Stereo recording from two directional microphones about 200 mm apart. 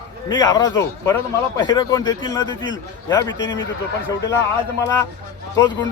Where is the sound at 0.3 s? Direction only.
20° left (ahead or behind).